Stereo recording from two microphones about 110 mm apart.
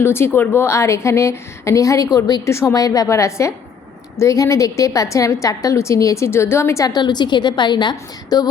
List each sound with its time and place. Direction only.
0.0 s a woman's voice: 20° left (ahead or behind)
6.9 s a woman's voice: 40° left (ahead or behind)